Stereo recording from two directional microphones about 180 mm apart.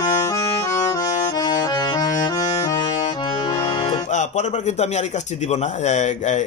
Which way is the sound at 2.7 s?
40° left (ahead or behind).